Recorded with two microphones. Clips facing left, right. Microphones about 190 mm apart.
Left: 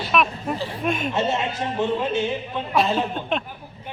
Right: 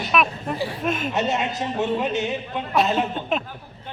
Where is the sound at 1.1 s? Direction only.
20° right (ahead or behind).